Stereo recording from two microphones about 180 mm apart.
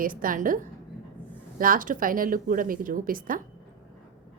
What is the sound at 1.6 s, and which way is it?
A woman's voice, 50° right (ahead or behind).